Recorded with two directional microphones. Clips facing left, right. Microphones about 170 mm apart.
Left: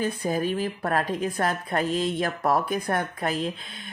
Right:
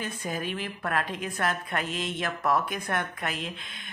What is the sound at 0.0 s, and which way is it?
Speech, 35° left (ahead or behind).